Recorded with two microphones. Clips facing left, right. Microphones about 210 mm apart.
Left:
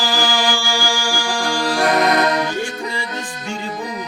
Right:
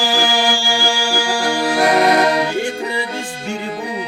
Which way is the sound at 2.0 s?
30° right (ahead or behind).